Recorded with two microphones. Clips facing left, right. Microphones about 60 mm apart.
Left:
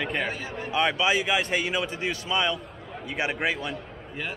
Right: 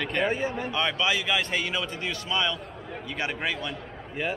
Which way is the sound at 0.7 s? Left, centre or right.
Centre.